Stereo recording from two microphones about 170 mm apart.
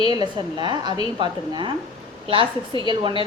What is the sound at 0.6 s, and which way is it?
Speech, 25° right (ahead or behind).